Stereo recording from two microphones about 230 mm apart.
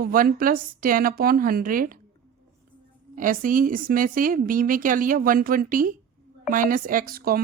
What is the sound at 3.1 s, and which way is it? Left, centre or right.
A woman's voice, right.